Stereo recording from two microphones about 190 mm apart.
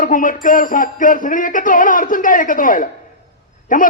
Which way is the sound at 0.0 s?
45° left (ahead or behind).